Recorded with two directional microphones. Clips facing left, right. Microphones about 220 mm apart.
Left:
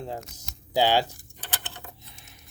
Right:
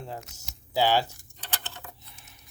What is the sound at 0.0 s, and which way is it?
Speech, 20° left (ahead or behind).